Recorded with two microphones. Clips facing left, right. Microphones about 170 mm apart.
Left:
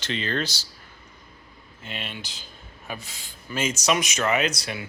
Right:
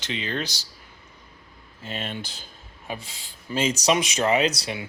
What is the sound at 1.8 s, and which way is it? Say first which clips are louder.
Speech: right 4 dB; 40° right (ahead or behind).